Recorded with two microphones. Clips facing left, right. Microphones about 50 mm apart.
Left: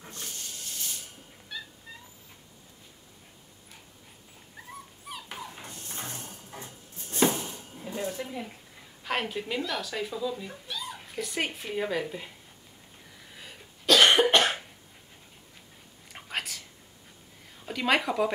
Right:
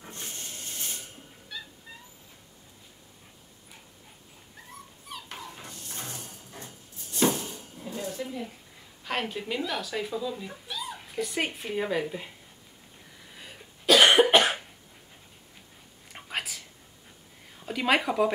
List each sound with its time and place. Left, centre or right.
0.1 s hiss: right
1.5 s cat: centre
4.6 s dog: centre
5.8 s a sound: left
7.5 s dishes: centre
9.0 s speech: centre
13.3 s cough: centre
16.1 s whispering: centre
17.6 s speech: centre